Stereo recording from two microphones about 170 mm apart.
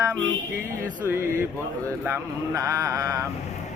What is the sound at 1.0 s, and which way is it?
Speech, 15° right (ahead or behind).